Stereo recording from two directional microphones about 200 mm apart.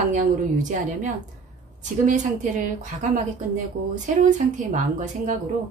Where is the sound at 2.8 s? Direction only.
40° right (ahead or behind).